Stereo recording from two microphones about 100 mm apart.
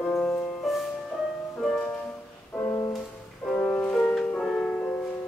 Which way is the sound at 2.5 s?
25° left (ahead or behind).